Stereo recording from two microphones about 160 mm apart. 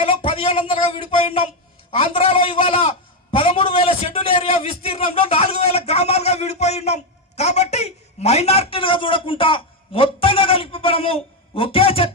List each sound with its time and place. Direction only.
0.0 s a man's voice: 35° left (ahead or behind)